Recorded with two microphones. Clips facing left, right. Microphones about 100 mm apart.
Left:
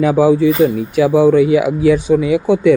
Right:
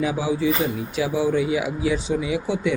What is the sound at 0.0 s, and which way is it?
Speech, 55° left (ahead or behind).